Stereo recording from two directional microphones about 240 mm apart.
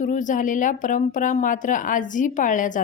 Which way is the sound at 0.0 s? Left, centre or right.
Left.